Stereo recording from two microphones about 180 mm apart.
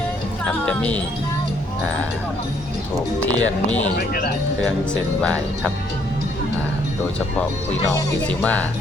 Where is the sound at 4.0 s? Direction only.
60° left (ahead or behind).